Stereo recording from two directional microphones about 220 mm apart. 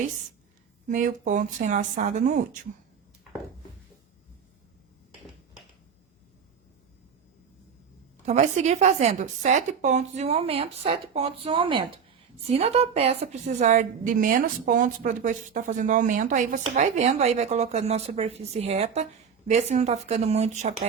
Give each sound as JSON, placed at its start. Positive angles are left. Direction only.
{"t": 0.9, "sound": "a woman's voice", "side_deg": -35}
{"t": 8.2, "sound": "a woman's voice", "side_deg": -30}